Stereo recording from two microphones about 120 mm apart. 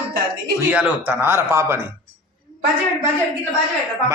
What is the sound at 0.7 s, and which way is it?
Speech, 15° right (ahead or behind).